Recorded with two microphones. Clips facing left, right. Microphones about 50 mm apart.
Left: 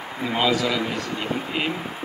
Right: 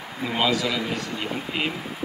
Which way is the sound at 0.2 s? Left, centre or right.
Left.